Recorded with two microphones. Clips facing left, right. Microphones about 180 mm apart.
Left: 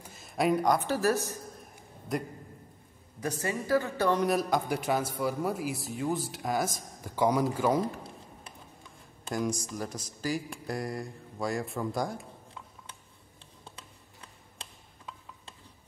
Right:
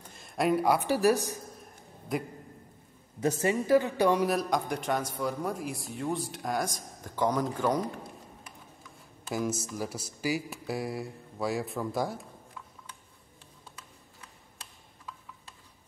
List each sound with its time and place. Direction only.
0.0 s speech: 5° left (ahead or behind); by 1.4 s 15° right (ahead or behind)
3.2 s a woman's voice: 25° right (ahead or behind)
4.3 s a man's voice: centre (ahead or behind)
9.3 s a man's voice: 5° right (ahead or behind)
13.7 s a sound: 25° left (ahead or behind)